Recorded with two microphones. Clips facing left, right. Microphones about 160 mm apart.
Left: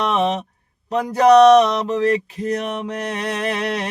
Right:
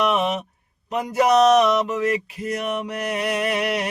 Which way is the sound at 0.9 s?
35° left (ahead or behind).